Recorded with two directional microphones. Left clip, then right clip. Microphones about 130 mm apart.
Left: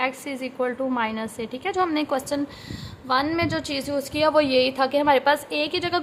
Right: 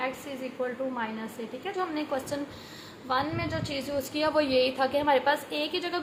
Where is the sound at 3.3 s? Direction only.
70° left (ahead or behind).